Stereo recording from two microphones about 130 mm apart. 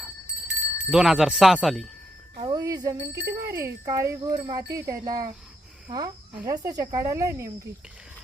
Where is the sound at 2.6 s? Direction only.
30° right (ahead or behind).